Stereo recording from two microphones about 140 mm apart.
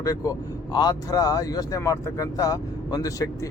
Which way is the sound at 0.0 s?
25° left (ahead or behind).